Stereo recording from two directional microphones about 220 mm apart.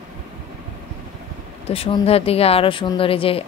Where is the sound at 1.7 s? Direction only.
25° left (ahead or behind).